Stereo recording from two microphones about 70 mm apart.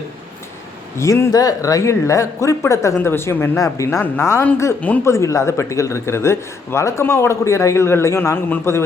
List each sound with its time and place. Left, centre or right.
0.9 s speech: left
3.1 s a man's voice: left
3.8 s a man's voice: left